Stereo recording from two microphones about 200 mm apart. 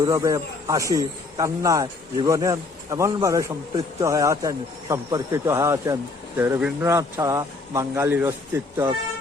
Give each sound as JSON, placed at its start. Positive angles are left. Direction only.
{"t": 0.0, "sound": "speech", "side_deg": -15}